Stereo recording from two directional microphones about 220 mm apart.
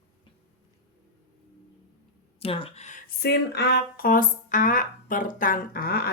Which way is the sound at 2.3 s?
25° left (ahead or behind).